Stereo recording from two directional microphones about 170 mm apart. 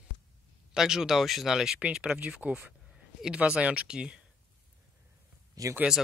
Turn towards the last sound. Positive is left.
turn(degrees=-20)  # may be behind; listen again after turning